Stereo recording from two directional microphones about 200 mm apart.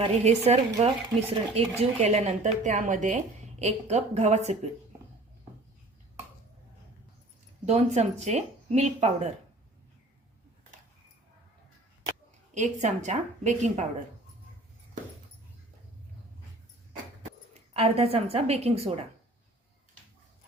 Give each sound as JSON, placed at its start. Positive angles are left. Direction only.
{"t": 0.0, "sound": "speech", "side_deg": -30}
{"t": 7.6, "sound": "speech", "side_deg": -35}
{"t": 12.5, "sound": "speech", "side_deg": -35}
{"t": 17.5, "sound": "a woman's voice", "side_deg": -30}